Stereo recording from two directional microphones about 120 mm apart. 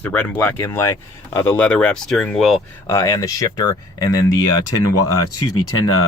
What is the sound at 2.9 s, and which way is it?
Speech, 25° left (ahead or behind).